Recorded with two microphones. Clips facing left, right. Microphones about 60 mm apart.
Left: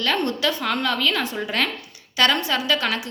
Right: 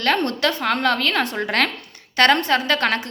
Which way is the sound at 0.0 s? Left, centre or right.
Right.